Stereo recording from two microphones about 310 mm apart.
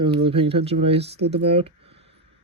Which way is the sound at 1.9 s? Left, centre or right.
Right.